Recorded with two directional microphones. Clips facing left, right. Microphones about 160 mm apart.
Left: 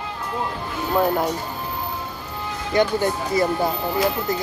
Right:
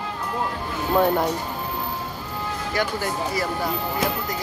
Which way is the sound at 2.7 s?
20° left (ahead or behind).